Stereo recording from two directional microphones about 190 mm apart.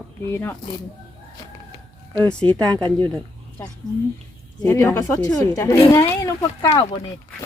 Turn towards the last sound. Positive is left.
turn(degrees=20)  # may be behind; listen again after turning